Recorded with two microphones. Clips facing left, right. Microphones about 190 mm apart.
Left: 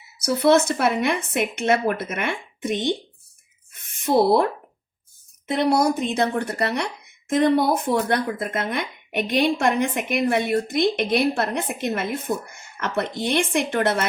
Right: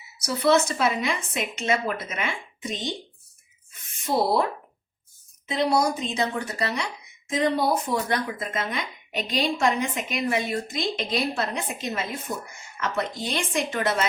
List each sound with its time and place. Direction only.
0.2 s speech: 55° left (ahead or behind)
5.5 s speech: 55° left (ahead or behind)